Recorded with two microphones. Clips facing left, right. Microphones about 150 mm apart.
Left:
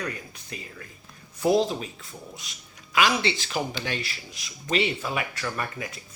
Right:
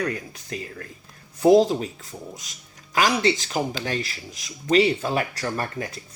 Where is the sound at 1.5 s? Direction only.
35° right (ahead or behind).